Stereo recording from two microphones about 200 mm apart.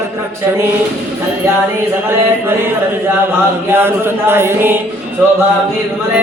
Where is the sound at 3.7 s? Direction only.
10° right (ahead or behind).